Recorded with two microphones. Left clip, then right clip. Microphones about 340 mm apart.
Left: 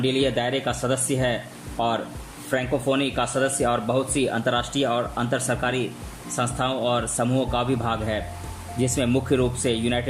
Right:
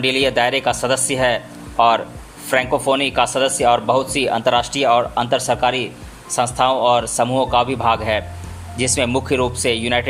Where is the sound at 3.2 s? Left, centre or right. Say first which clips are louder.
Right 7 dB; centre.